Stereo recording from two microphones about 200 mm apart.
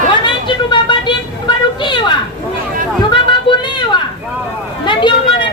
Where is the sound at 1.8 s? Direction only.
25° left (ahead or behind).